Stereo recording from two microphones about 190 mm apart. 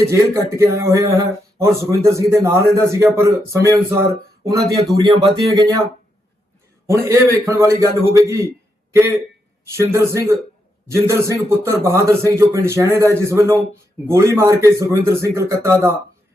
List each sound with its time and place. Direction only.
0.1 s speech: 15° right (ahead or behind)
6.8 s speech: 15° right (ahead or behind)
9.7 s speech: 15° right (ahead or behind)